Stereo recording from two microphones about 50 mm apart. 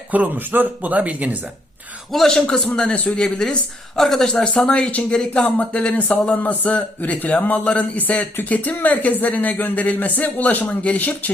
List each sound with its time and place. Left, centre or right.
0.1 s speech: right
2.2 s a man's voice: centre; by 11.3 s left